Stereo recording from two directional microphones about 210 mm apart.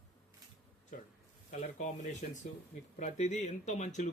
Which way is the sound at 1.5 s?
35° left (ahead or behind).